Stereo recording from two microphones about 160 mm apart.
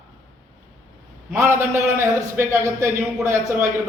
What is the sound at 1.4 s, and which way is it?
A man's voice, 15° right (ahead or behind).